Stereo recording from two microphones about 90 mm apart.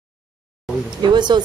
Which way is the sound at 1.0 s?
55° right (ahead or behind).